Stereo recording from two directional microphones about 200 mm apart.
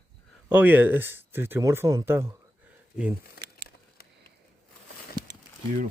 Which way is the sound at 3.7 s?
50° left (ahead or behind).